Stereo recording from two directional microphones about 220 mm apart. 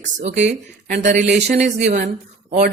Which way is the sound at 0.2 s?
30° right (ahead or behind).